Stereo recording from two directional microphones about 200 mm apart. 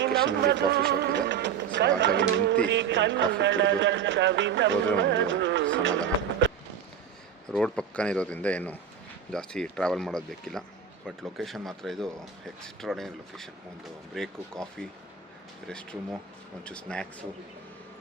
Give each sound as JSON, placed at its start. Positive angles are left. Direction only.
{"t": 0.0, "sound": "speech", "side_deg": -55}
{"t": 7.5, "sound": "speech", "side_deg": 5}
{"t": 16.6, "sound": "speech", "side_deg": 5}